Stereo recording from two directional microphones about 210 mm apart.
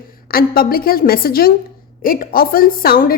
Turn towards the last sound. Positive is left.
turn(degrees=45)  # may be behind; listen again after turning